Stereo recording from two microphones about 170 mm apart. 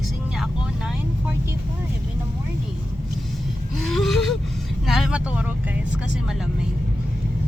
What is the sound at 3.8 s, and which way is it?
Speech, centre (ahead or behind).